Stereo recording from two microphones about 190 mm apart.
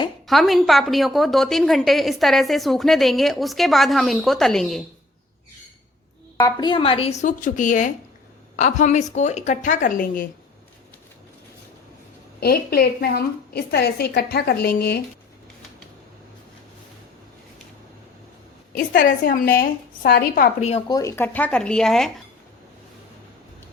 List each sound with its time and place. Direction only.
0.3 s a woman's voice: centre (ahead or behind)
6.3 s a woman's voice: 20° left (ahead or behind); by 10.2 s 45° left (ahead or behind)
12.4 s a woman's voice: 55° left (ahead or behind)
18.9 s a woman's voice: 45° left (ahead or behind)
20.6 s a woman's voice: 35° left (ahead or behind)
20.9 s a woman's voice: 15° left (ahead or behind)